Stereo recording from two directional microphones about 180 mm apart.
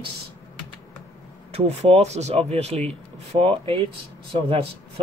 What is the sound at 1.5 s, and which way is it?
Speech, 35° right (ahead or behind).